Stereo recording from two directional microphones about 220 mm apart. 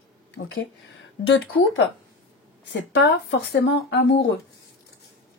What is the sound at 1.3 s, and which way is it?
Speech, 60° left (ahead or behind).